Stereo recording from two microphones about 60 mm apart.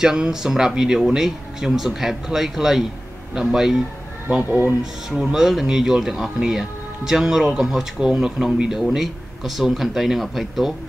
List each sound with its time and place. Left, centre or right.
0.0 s speech: centre
4.5 s speech: right
5.1 s speech: centre